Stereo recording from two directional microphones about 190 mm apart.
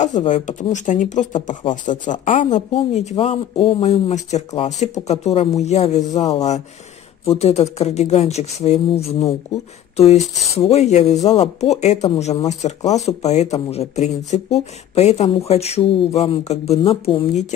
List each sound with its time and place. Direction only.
0.3 s speech: 40° left (ahead or behind)